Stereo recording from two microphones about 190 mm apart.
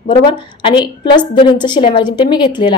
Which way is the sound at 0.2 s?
25° left (ahead or behind).